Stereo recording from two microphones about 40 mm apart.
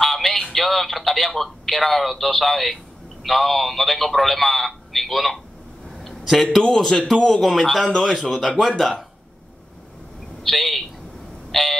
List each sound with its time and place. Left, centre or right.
0.0 s telephone: centre
3.3 s a man's voice: centre
5.9 s a sound: centre
6.5 s a man's voice: centre
10.4 s a man's voice: centre
11.5 s a sound: centre